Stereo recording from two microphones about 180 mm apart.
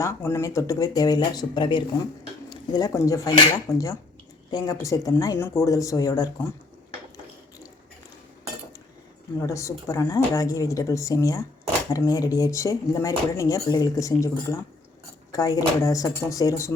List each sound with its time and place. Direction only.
0.0 s speech: 15° left (ahead or behind)
9.4 s a woman's voice: 15° left (ahead or behind)